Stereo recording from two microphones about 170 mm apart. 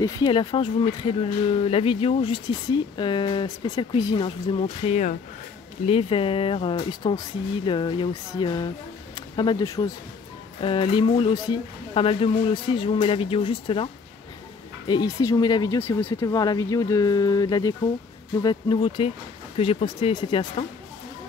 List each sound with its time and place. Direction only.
0.0 s speech: 30° left (ahead or behind)
14.9 s speech: 20° left (ahead or behind)